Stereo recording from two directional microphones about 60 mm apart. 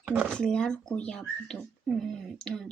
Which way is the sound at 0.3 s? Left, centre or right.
Centre.